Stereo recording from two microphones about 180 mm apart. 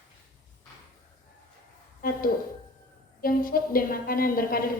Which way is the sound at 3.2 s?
55° left (ahead or behind).